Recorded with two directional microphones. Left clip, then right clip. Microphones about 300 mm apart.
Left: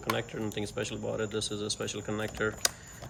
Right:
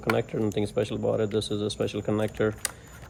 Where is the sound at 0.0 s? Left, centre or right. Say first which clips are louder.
Right 6 dB; centre.